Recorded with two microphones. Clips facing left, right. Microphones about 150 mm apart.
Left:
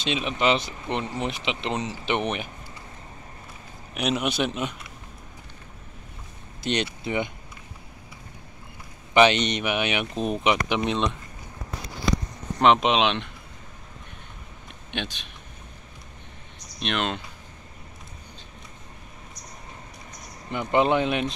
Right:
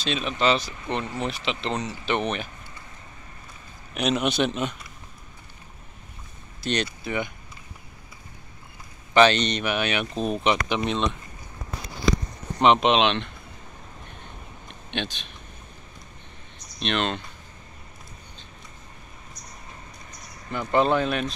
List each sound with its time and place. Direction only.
0.0 s speech: 20° left (ahead or behind)
3.9 s a man's voice: 5° left (ahead or behind)
6.6 s speech: 20° left (ahead or behind)
9.1 s a man's voice: 15° left (ahead or behind)
10.9 s speech: centre (ahead or behind)
12.5 s speech: centre (ahead or behind)
14.9 s speech: 10° left (ahead or behind)
16.8 s a man's voice: 5° left (ahead or behind)
20.4 s speech: 20° left (ahead or behind)